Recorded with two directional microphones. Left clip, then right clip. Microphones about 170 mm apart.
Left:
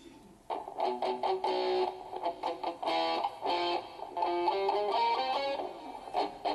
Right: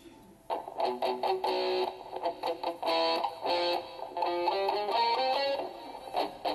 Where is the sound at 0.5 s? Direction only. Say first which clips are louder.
Right 2 dB; 25° right (ahead or behind).